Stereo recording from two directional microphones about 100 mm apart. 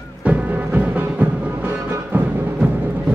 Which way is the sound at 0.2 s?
15° right (ahead or behind).